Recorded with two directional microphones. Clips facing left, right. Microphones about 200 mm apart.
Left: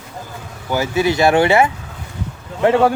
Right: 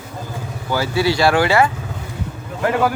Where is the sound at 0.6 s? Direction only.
20° left (ahead or behind).